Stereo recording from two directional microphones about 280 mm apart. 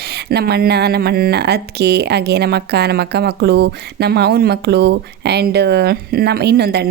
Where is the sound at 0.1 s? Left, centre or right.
Right.